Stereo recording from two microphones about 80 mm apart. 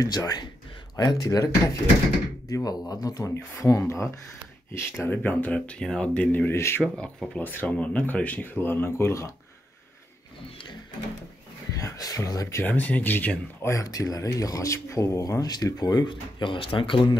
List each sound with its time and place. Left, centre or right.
0.0 s speech: left
5.1 s speech: left
6.5 s speech: left
6.8 s speech: centre
7.3 s speech: left
11.7 s speech: left
12.6 s speech: left
13.7 s speech: left
15.5 s speech: left